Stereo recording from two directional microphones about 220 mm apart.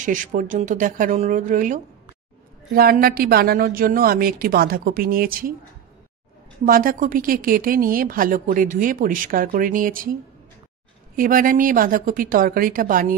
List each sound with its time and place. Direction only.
0.0 s speech: 35° right (ahead or behind)
6.6 s speech: 40° right (ahead or behind)
11.1 s speech: 40° right (ahead or behind)